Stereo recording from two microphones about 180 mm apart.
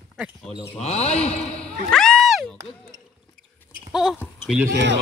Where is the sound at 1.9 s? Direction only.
5° left (ahead or behind).